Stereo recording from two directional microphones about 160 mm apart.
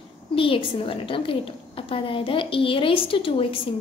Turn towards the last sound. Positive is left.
turn(degrees=35)  # may be behind; listen again after turning